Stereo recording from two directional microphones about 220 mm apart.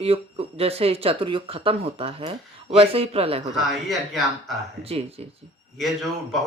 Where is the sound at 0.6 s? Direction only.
25° right (ahead or behind).